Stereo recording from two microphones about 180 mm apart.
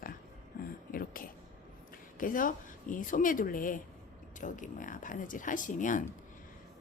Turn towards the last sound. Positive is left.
turn(degrees=45)  # may be behind; listen again after turning